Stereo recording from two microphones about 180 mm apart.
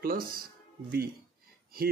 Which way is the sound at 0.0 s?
55° right (ahead or behind).